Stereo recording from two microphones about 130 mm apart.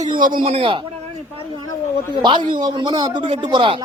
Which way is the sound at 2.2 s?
35° right (ahead or behind).